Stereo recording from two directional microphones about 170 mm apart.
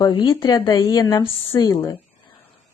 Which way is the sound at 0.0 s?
25° left (ahead or behind).